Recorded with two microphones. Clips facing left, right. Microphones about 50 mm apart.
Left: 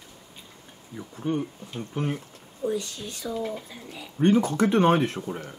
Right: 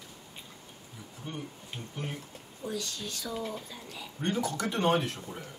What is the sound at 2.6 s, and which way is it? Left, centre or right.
Speech, centre.